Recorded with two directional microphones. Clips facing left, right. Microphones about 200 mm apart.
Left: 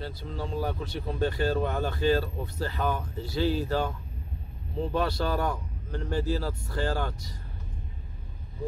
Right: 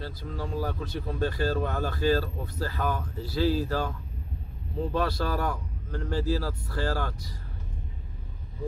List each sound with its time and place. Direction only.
0.0 s speech: 25° left (ahead or behind)
4.9 s speech: 25° left (ahead or behind)